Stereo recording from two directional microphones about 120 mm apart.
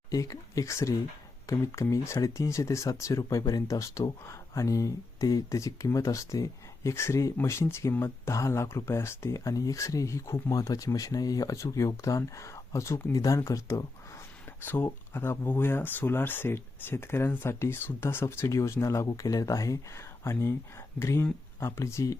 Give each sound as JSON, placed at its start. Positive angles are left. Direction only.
{"t": 0.1, "sound": "speech", "side_deg": 30}
{"t": 14.6, "sound": "speech", "side_deg": 15}